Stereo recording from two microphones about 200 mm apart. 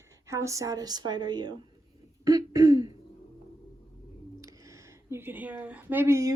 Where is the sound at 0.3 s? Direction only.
15° right (ahead or behind).